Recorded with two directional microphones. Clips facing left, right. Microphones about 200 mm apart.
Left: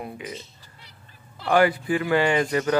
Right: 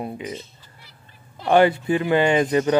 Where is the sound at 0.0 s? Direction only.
25° right (ahead or behind).